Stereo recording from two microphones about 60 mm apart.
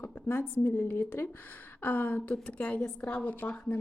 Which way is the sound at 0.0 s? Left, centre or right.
Left.